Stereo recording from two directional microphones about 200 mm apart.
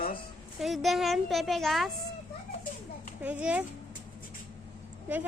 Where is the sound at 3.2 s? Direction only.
5° right (ahead or behind).